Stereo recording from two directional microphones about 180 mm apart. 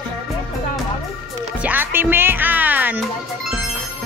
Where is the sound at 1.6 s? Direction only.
10° right (ahead or behind).